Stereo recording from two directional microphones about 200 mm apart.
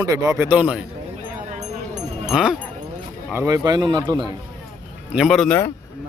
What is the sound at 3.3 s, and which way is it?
Speech, 15° right (ahead or behind).